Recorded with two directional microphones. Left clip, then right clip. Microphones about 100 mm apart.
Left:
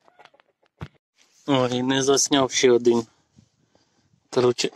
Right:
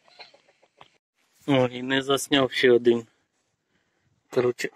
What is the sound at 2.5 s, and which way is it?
Speech, 30° right (ahead or behind).